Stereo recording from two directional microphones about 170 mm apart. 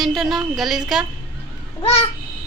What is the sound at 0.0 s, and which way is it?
Speech, centre (ahead or behind).